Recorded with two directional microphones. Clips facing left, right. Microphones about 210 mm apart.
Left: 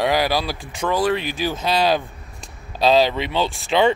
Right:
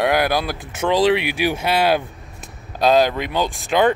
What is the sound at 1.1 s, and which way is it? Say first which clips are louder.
Speech: right 4 dB; 70° right (ahead or behind).